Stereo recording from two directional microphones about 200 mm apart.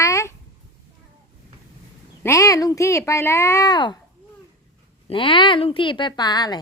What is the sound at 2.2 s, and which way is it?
Speech, 15° left (ahead or behind).